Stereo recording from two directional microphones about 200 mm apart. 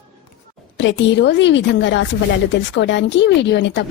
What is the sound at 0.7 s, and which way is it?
A woman's voice, 65° left (ahead or behind).